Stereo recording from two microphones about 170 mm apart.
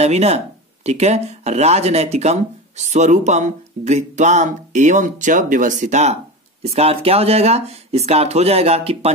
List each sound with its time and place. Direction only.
0.0 s speech: 40° right (ahead or behind)